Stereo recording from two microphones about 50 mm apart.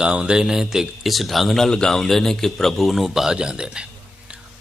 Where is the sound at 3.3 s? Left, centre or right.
Centre.